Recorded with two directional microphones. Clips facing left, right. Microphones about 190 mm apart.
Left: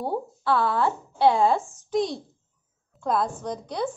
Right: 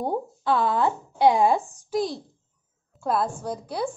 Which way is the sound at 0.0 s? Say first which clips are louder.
Right 1 dB; 20° right (ahead or behind).